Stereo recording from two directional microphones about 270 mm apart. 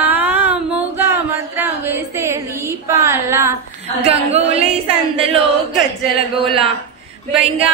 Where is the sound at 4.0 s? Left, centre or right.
Right.